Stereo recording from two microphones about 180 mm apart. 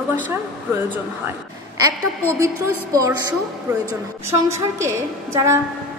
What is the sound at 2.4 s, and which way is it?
Speech, 20° right (ahead or behind).